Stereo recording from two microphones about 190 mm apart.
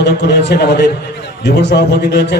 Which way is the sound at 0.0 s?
65° left (ahead or behind).